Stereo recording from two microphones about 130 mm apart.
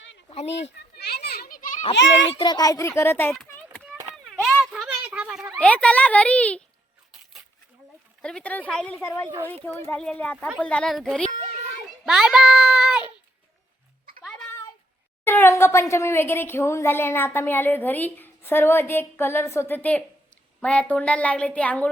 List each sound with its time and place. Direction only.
0.3 s speech: 55° left (ahead or behind)
1.5 s children playing: 90° left
2.3 s a child's voice: 35° left (ahead or behind); by 3.8 s 15° left (ahead or behind)
4.6 s a sound: centre (ahead or behind)
5.5 s a woman's voice: 10° left (ahead or behind)
8.2 s a woman's voice: 5° left (ahead or behind)
9.9 s a woman's voice: 10° left (ahead or behind)
12.0 s a sound: 5° right (ahead or behind)
15.2 s a woman's voice: 15° left (ahead or behind)